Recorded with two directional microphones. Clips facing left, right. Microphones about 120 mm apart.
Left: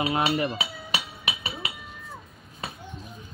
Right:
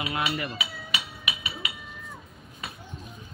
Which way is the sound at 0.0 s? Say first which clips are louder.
Left 5 dB; 35° left (ahead or behind).